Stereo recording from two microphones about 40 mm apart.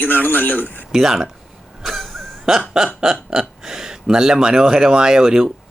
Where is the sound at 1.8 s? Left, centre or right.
Centre.